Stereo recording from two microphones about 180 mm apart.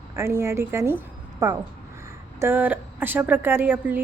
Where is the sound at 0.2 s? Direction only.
15° right (ahead or behind).